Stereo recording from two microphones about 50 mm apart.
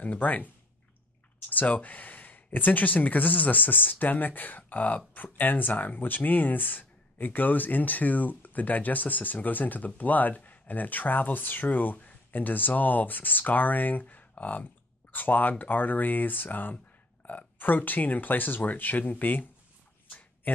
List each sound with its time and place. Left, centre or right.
0.0 s speech: left
1.5 s speech: left
20.1 s a sound: left